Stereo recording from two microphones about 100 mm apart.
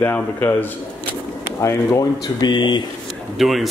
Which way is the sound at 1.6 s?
30° left (ahead or behind).